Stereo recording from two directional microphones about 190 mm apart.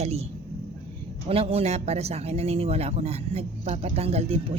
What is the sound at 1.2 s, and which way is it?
Speech, 30° right (ahead or behind).